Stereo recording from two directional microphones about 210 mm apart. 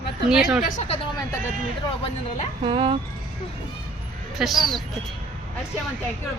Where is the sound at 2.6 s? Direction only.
25° right (ahead or behind).